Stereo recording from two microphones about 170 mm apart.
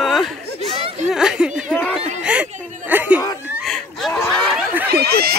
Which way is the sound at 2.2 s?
10° right (ahead or behind).